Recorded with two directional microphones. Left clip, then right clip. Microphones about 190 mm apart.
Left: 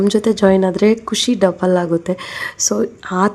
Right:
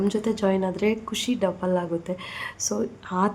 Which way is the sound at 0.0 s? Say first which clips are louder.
Left 11 dB; 30° left (ahead or behind).